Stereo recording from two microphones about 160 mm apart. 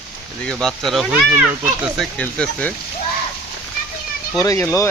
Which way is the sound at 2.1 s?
5° left (ahead or behind).